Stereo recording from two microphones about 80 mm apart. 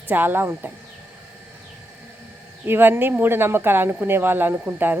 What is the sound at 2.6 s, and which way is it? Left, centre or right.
A woman's voice, right.